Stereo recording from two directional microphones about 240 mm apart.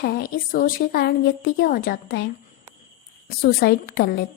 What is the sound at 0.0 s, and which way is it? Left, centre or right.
A woman's voice, left.